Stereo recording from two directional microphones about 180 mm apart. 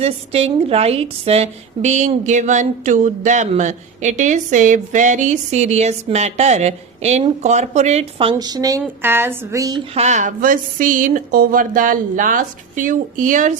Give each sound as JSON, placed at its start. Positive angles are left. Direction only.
{"t": 0.0, "sound": "a woman's voice", "side_deg": -35}
{"t": 9.9, "sound": "speech", "side_deg": -40}